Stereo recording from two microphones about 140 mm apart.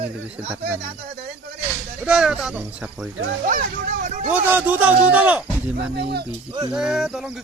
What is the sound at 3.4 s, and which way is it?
Speech, 75° right (ahead or behind).